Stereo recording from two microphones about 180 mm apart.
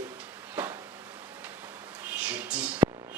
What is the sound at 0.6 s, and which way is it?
Speech, 5° right (ahead or behind).